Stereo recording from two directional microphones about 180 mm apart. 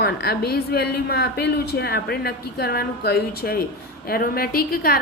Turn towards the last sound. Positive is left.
turn(degrees=55)  # may be behind; listen again after turning